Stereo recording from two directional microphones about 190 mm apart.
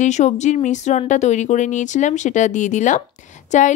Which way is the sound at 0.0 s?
40° left (ahead or behind).